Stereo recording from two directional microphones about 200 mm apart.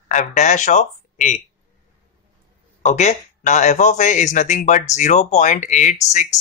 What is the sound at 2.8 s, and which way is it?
Speech, 35° left (ahead or behind).